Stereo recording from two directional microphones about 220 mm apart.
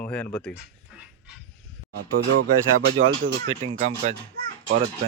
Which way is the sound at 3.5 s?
25° right (ahead or behind).